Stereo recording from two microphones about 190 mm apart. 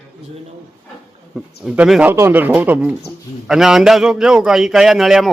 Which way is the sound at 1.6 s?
5° right (ahead or behind).